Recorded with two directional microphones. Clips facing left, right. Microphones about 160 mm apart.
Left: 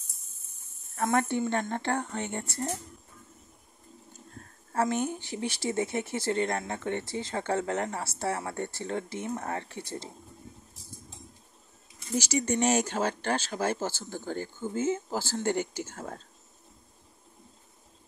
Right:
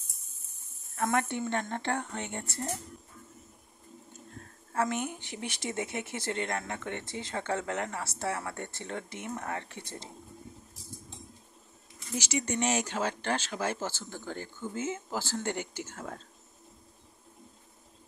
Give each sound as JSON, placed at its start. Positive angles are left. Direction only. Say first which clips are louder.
{"t": 0.9, "sound": "speech", "louder": "left 3 dB", "side_deg": 35}
{"t": 4.7, "sound": "speech", "louder": "left 3 dB", "side_deg": 35}
{"t": 12.2, "sound": "speech", "louder": "left 4 dB", "side_deg": 40}